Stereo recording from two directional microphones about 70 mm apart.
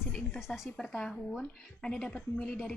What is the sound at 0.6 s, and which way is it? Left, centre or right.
A woman's voice, centre.